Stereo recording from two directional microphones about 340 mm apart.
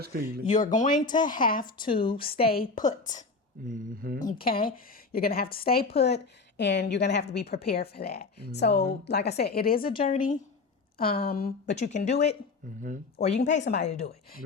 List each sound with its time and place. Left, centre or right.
0.0 s speech: right
0.4 s a woman's voice: left
2.2 s a woman's voice: left
3.6 s speech: right
4.2 s a woman's voice: left